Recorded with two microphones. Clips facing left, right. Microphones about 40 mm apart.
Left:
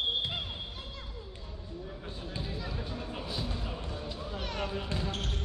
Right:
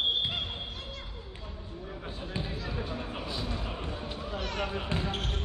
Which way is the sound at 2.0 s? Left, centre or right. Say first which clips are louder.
Right 5 dB; right.